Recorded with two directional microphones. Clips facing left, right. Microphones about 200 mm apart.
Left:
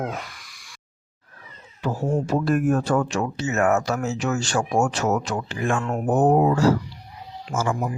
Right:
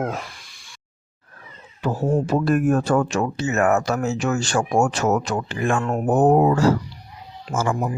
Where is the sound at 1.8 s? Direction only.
50° right (ahead or behind).